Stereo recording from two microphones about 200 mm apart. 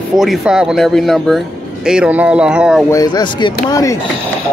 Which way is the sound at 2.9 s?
20° left (ahead or behind).